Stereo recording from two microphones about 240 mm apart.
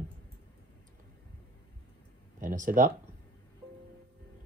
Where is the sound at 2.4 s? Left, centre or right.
Right.